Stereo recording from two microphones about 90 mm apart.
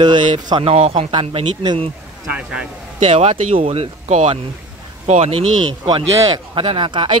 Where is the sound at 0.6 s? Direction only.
90° right.